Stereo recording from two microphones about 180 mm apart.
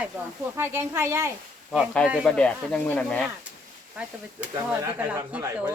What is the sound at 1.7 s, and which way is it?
Speech, 5° left (ahead or behind).